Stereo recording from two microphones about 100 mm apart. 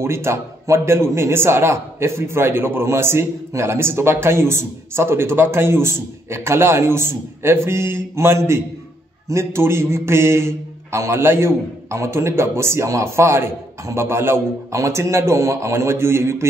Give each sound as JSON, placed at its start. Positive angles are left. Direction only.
{"t": 0.0, "sound": "a man's voice", "side_deg": -25}